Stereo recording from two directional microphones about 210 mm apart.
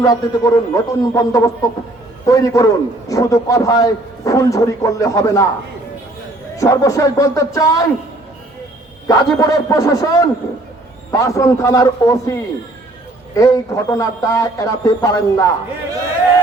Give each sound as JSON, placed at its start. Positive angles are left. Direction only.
{"t": 0.0, "sound": "a man's voice", "side_deg": 15}
{"t": 6.6, "sound": "a man's voice", "side_deg": 15}
{"t": 9.0, "sound": "a man's voice", "side_deg": 15}